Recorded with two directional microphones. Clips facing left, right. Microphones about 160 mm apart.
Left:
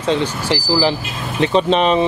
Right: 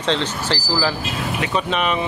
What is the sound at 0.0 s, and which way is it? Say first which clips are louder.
Speech: left 3 dB; 10° left (ahead or behind).